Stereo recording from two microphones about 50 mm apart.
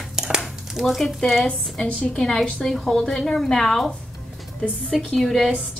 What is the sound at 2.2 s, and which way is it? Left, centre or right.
A woman's voice, centre.